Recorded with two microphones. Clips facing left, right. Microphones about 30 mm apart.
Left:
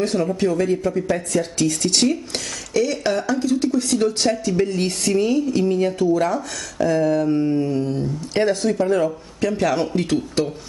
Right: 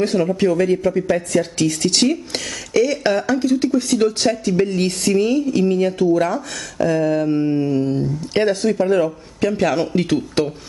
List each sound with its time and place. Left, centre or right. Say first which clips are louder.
0.0 s speech: right 3 dB; centre
8.5 s speech: right 2 dB; centre